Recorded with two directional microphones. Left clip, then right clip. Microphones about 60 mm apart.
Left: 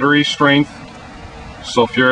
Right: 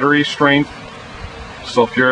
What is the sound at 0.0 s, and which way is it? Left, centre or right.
Speech, left.